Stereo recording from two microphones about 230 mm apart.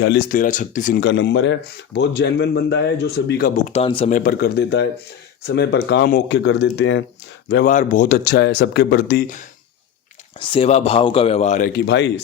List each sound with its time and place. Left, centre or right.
0.0 s speech: left
3.7 s speech: left
4.2 s speech: left
7.7 s speech: left
10.4 s speech: left
11.9 s speech: left